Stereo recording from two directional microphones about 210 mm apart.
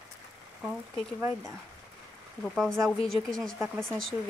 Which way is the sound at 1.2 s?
15° right (ahead or behind).